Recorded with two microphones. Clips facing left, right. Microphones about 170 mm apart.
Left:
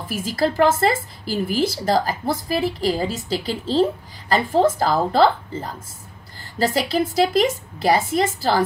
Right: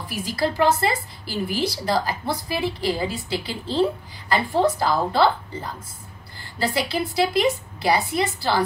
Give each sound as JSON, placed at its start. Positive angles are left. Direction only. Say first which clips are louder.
{"t": 0.0, "sound": "a woman's voice", "louder": "left 3 dB", "side_deg": 45}